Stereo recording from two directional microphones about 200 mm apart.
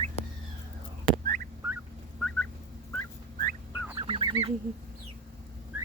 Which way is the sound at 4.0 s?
25° right (ahead or behind).